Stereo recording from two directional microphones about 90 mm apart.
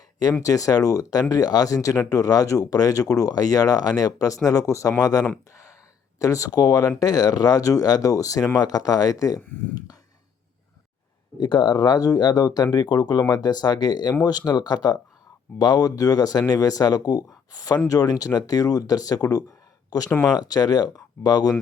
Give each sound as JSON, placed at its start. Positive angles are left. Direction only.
{"t": 0.4, "sound": "speech", "side_deg": 40}
{"t": 11.3, "sound": "speech", "side_deg": 55}